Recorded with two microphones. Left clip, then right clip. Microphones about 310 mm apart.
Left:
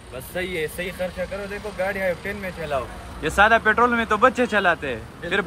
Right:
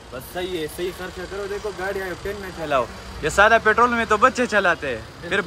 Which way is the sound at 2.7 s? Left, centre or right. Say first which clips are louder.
Right 6 dB; right.